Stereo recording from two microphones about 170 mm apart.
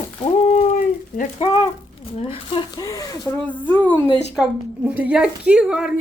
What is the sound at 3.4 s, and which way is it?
Speech, 10° left (ahead or behind).